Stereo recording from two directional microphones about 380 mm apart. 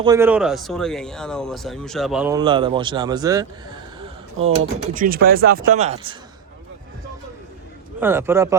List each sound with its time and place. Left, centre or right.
0.0 s speech: centre
8.0 s speech: centre